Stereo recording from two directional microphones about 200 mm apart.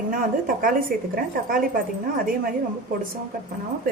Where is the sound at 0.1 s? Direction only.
45° right (ahead or behind).